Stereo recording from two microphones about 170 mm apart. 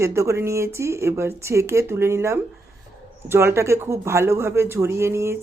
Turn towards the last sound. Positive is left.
turn(degrees=-15)  # may be behind; listen again after turning